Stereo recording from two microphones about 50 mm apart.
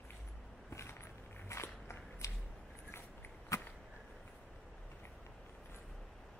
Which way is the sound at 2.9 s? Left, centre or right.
Left.